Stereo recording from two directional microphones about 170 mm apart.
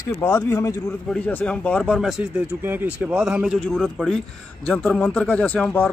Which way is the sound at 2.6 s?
10° right (ahead or behind).